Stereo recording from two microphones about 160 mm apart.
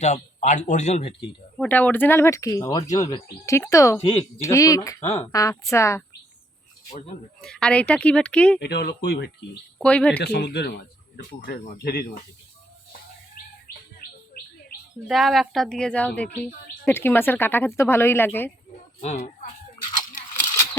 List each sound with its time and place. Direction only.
0.0 s speech: 45° left (ahead or behind)
1.6 s a woman's voice: 10° left (ahead or behind)
7.4 s a woman's voice: 5° left (ahead or behind)
8.6 s speech: 90° left
9.8 s a woman's voice: 5° left (ahead or behind)
10.2 s speech: 90° left
11.2 s speech: 75° left (ahead or behind)
15.0 s a woman's voice: centre (ahead or behind)
19.0 s speech: 45° left (ahead or behind)